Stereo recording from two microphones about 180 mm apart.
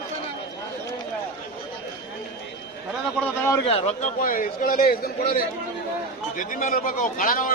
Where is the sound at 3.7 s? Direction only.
35° left (ahead or behind); by 7.5 s 50° left (ahead or behind).